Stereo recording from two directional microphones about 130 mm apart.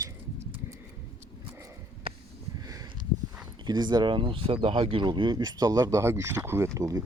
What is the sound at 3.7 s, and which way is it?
Speech, 35° right (ahead or behind).